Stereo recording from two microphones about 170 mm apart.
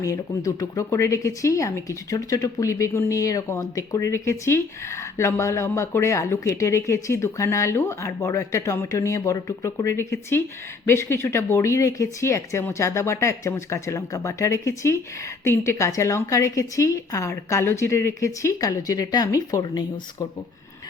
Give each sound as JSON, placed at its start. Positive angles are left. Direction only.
{"t": 0.0, "sound": "a woman's voice", "side_deg": 20}